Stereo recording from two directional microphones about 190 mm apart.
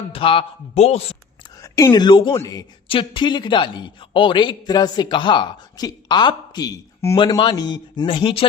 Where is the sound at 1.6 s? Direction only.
15° left (ahead or behind).